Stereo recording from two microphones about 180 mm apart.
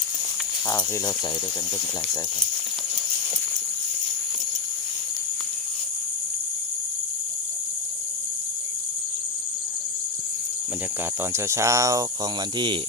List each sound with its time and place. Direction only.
0.7 s speech: 20° left (ahead or behind)
11.2 s speech: 15° right (ahead or behind)